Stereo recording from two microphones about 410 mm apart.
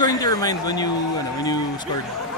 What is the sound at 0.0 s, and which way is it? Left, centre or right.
Speech, centre.